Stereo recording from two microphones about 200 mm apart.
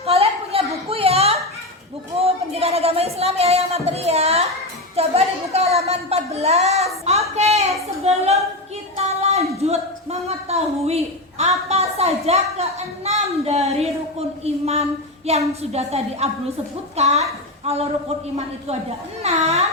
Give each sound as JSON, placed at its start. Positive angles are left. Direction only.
{"t": 0.0, "sound": "a sound", "side_deg": -30}
{"t": 15.3, "sound": "a woman's voice", "side_deg": -30}
{"t": 19.2, "sound": "a woman's voice", "side_deg": -30}